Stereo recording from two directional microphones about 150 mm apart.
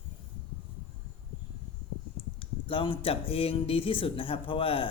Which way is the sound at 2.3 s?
35° left (ahead or behind).